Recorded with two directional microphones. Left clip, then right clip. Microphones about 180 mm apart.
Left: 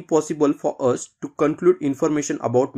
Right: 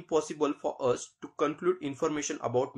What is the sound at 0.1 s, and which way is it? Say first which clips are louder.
Speech: left 9 dB; 50° left (ahead or behind).